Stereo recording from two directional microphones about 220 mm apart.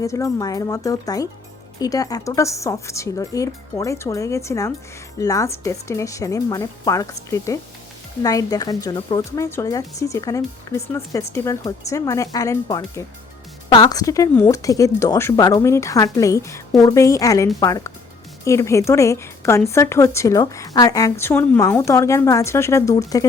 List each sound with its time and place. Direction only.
0.0 s a woman's voice: 15° left (ahead or behind)